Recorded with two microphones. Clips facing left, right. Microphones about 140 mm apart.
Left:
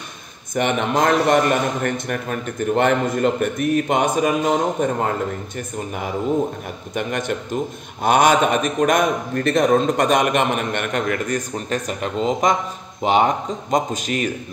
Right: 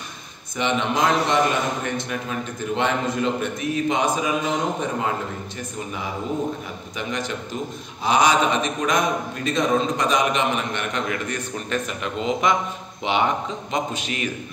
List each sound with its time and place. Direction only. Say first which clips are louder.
0.6 s a man's voice: left 3 dB; 55° left (ahead or behind)
7.0 s a man's voice: left 5 dB; 55° left (ahead or behind)